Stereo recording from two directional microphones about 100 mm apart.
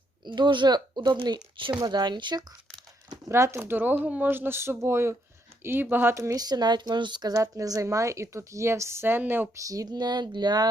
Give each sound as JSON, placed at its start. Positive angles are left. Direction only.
{"t": 0.3, "sound": "speech", "side_deg": -50}
{"t": 3.1, "sound": "speech", "side_deg": -30}
{"t": 9.6, "sound": "speech", "side_deg": -40}